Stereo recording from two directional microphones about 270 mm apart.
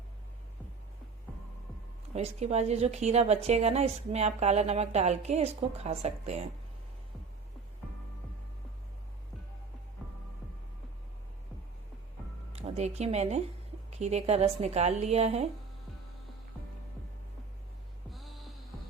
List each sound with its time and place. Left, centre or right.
2.1 s a woman's voice: right
12.5 s a woman's voice: right